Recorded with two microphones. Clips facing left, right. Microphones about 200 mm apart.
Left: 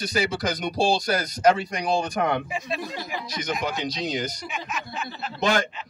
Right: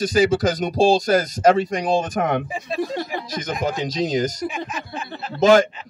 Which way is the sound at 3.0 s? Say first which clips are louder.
Right 5 dB; 55° right (ahead or behind).